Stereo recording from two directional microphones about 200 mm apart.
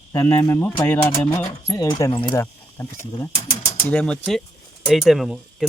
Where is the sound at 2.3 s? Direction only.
10° left (ahead or behind).